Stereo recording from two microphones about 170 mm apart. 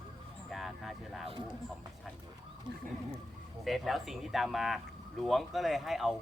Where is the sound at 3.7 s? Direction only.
Centre (ahead or behind).